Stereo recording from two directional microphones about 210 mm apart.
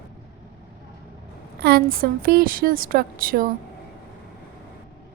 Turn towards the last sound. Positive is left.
turn(degrees=-40)  # may be behind; listen again after turning